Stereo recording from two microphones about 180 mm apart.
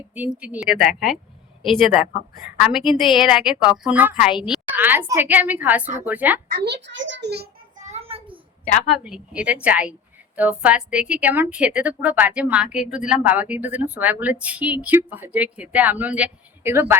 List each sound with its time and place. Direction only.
0.1 s a woman's voice: 5° right (ahead or behind)
2.6 s a woman's voice: 5° right (ahead or behind)
6.5 s a child's voice: 65° right (ahead or behind)
7.9 s child singing: 35° right (ahead or behind)
8.9 s a woman's voice: 5° right (ahead or behind)